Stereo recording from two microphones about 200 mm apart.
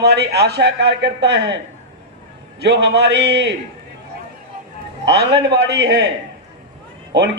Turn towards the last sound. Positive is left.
turn(degrees=-60)  # may be behind; listen again after turning